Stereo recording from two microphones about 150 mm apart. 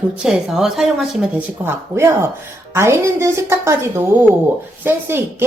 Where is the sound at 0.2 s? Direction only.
5° right (ahead or behind).